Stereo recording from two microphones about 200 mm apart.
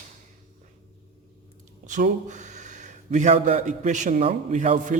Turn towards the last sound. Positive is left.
turn(degrees=-35)  # may be behind; listen again after turning